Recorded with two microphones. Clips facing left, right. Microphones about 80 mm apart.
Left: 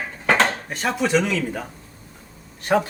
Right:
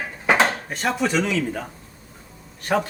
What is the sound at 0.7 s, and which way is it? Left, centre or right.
Speech, centre.